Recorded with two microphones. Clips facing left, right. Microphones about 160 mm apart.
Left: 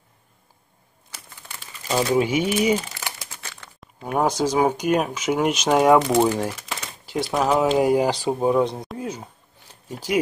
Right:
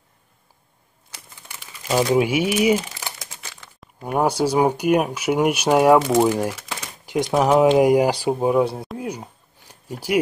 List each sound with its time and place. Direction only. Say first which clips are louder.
1.5 s speech: right 3 dB; 15° right (ahead or behind)
3.2 s crumpling: even; 15° right (ahead or behind)
3.8 s speech: right 1 dB; 5° right (ahead or behind)
7.7 s a sound: right 3 dB; 15° right (ahead or behind)